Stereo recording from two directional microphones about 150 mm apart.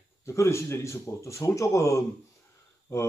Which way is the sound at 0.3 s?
20° left (ahead or behind).